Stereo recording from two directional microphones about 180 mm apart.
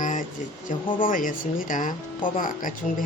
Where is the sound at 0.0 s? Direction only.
45° left (ahead or behind).